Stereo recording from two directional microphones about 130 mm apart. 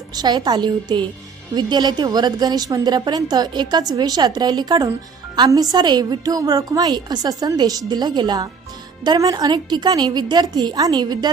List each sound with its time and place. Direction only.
0.2 s a woman's voice: 35° right (ahead or behind)